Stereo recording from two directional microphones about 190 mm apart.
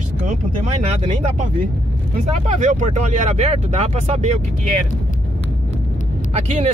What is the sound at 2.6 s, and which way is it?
Speech, 40° right (ahead or behind).